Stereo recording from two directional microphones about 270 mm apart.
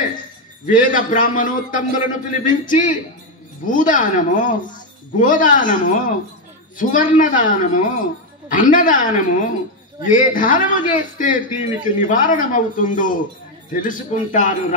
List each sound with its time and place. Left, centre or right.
0.8 s speech: left